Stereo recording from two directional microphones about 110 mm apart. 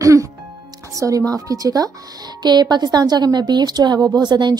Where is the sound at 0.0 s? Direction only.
30° right (ahead or behind).